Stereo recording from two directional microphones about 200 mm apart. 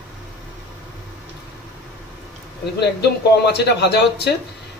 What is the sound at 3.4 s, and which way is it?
Speech, 55° left (ahead or behind).